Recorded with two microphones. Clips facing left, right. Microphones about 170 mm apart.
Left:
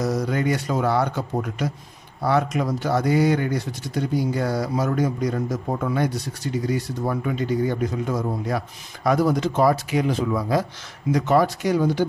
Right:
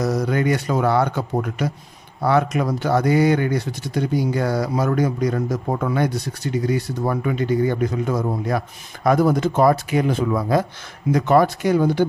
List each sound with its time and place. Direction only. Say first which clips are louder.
0.0 s speech: right 2 dB; 65° right (ahead or behind)